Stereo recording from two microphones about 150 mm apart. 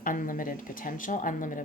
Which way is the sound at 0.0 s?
65° left (ahead or behind).